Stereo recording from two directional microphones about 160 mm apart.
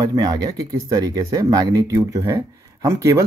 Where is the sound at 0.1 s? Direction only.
25° right (ahead or behind).